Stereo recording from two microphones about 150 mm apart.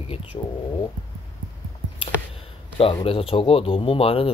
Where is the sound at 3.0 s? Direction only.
40° left (ahead or behind).